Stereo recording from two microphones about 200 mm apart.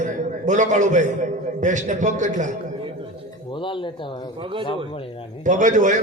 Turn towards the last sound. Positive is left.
turn(degrees=-40)  # may be behind; listen again after turning